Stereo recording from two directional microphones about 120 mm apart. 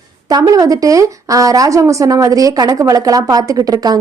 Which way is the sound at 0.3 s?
30° right (ahead or behind).